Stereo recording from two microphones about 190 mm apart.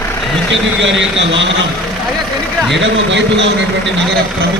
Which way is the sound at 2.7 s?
70° right (ahead or behind).